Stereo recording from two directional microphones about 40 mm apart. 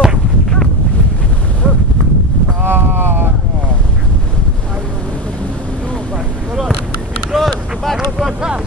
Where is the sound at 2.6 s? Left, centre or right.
Right.